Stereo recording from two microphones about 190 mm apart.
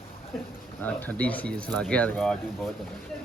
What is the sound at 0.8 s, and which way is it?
A man's voice, 10° left (ahead or behind).